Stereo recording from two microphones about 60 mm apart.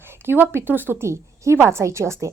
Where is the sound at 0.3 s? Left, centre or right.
Right.